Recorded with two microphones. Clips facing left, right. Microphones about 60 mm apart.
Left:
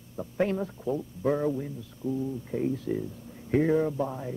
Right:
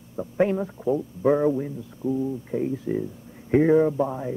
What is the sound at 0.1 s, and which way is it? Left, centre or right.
Speech, centre.